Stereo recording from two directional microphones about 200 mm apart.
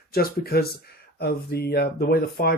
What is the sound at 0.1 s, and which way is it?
Speech, 50° left (ahead or behind).